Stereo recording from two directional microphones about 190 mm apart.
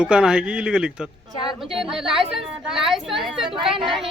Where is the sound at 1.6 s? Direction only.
Centre (ahead or behind).